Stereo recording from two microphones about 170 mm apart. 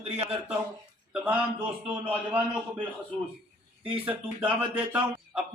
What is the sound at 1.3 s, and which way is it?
Speech, 10° right (ahead or behind).